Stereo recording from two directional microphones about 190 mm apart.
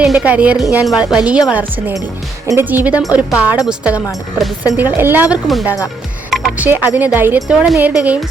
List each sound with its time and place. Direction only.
0.0 s speech: 5° right (ahead or behind)